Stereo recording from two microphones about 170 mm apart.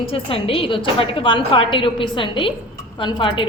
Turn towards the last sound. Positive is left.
turn(degrees=30)  # may be behind; listen again after turning